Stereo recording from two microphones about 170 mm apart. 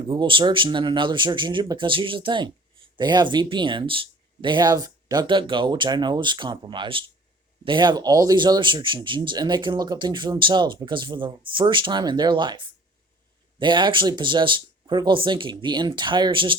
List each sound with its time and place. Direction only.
0.1 s speech: 30° right (ahead or behind)